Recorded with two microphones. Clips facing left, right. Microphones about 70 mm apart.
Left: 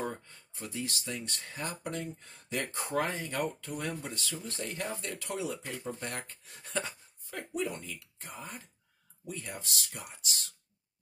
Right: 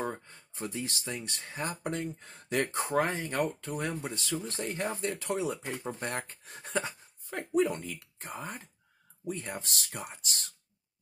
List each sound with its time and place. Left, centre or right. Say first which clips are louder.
0.0 s speech: right 2 dB; right
1.8 s speech: right 3 dB; right
4.0 s speech: right 4 dB; right
8.2 s speech: right 6 dB; right